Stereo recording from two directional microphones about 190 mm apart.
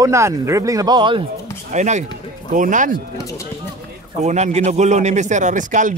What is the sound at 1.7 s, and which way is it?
A man's voice, 40° right (ahead or behind).